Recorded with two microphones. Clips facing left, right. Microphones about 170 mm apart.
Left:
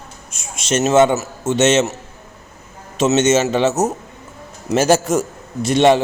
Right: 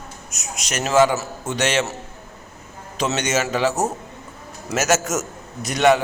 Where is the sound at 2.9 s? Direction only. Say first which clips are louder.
Left 8 dB; 25° left (ahead or behind).